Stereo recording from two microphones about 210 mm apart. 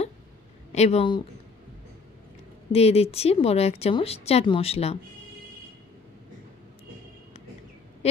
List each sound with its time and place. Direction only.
0.7 s speech: 30° left (ahead or behind)
2.7 s speech: 30° left (ahead or behind)
8.0 s a sound: 30° left (ahead or behind)